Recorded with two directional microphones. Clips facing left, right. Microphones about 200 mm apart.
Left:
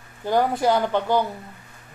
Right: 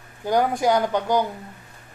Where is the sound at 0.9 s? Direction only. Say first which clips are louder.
Even; 15° right (ahead or behind).